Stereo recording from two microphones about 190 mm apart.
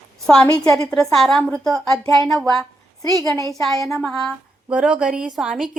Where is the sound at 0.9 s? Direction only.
Centre (ahead or behind).